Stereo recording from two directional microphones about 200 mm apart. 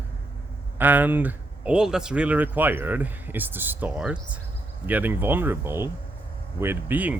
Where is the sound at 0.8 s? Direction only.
10° right (ahead or behind).